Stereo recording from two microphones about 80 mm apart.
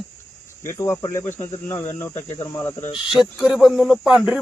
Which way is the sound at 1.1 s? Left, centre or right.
Left.